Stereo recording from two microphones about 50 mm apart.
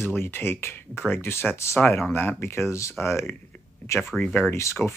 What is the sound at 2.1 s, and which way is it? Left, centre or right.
Speech, left.